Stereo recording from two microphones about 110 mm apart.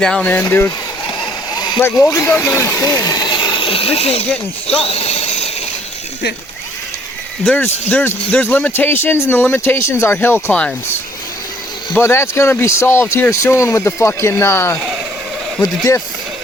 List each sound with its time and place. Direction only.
0.0 s speech: 10° left (ahead or behind)
0.4 s speech: 25° left (ahead or behind)
1.5 s a sound: 40° left (ahead or behind)
2.0 s speech: 25° left (ahead or behind)
3.0 s speech: 35° left (ahead or behind)
3.3 s speech: 50° left (ahead or behind)
4.8 s a sound: 65° left (ahead or behind)
7.4 s speech: 15° left (ahead or behind)
11.9 s speech: 20° left (ahead or behind)
15.6 s speech: 35° left (ahead or behind)